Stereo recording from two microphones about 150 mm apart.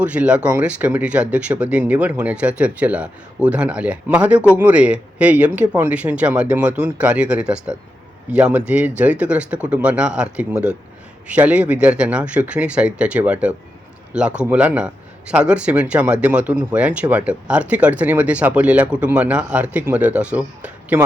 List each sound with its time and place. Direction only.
0.0 s speech: 10° right (ahead or behind)